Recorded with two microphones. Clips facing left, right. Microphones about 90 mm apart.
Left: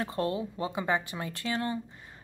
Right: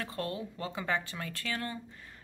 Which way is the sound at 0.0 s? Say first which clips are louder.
Left 6 dB; 25° left (ahead or behind).